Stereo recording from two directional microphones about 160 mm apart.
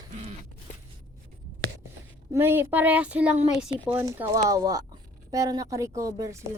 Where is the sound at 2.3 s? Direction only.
15° right (ahead or behind).